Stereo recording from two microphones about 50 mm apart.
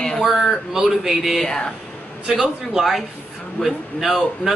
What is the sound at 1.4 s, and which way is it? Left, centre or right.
Speech, centre.